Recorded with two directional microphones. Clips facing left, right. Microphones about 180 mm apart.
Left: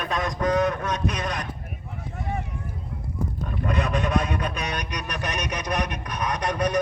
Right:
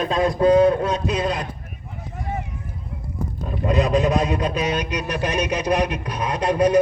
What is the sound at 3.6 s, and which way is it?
Speech, 25° right (ahead or behind).